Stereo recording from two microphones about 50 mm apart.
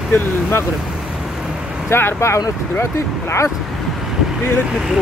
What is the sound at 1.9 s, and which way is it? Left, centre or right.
Speech, left.